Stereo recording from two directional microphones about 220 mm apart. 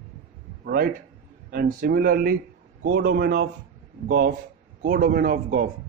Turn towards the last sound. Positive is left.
turn(degrees=-40)  # may be behind; listen again after turning